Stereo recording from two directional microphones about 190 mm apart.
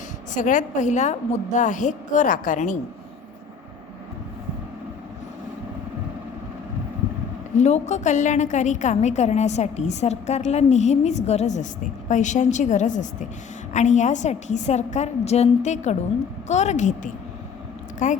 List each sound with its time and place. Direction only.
0.3 s a woman's voice: 40° left (ahead or behind)
7.5 s a woman's voice: 35° left (ahead or behind)